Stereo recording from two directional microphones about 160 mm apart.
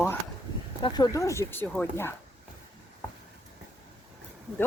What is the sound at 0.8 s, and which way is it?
Speech, 25° left (ahead or behind).